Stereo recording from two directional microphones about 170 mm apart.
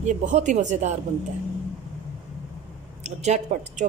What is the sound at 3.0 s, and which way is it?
Speech, 40° right (ahead or behind).